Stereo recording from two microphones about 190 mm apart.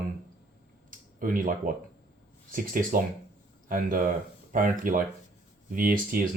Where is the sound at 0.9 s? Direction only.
45° right (ahead or behind).